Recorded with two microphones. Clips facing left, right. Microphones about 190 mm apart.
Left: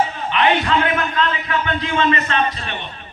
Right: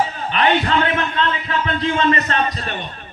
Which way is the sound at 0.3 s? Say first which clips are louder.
Even; 35° right (ahead or behind).